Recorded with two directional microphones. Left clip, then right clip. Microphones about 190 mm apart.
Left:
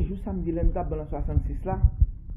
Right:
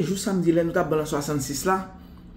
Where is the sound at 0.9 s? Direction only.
30° right (ahead or behind).